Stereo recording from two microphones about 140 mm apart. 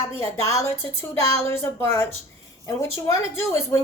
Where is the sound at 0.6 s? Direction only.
15° left (ahead or behind).